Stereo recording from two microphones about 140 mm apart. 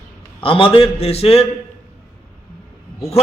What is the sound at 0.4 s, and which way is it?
A man's voice, 40° left (ahead or behind).